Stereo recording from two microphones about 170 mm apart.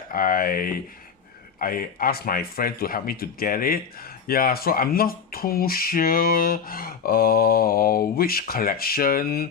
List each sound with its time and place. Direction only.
0.1 s speech: 55° left (ahead or behind)